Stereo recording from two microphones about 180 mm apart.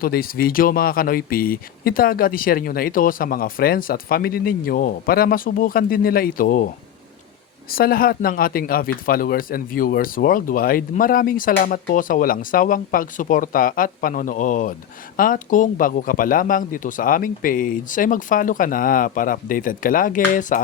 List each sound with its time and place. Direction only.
0.0 s speech: 55° left (ahead or behind)
7.7 s speech: 55° left (ahead or behind)